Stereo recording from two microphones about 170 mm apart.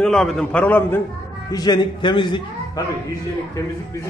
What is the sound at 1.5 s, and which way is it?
Speech, 25° left (ahead or behind).